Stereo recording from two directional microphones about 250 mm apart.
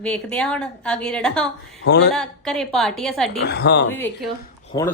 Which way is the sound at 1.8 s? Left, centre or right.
Left.